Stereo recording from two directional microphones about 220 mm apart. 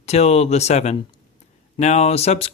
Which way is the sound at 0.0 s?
30° left (ahead or behind).